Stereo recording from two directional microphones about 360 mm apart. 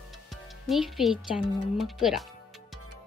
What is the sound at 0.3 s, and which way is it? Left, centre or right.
Speech, centre.